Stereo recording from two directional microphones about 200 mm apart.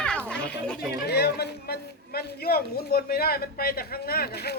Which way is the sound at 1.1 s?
55° left (ahead or behind).